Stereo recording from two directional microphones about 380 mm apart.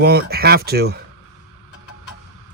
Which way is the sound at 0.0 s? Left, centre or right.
Right.